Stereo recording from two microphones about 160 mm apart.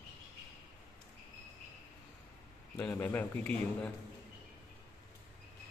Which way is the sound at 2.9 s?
10° left (ahead or behind).